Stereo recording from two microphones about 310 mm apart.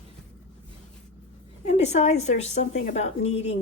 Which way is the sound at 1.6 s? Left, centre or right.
Left.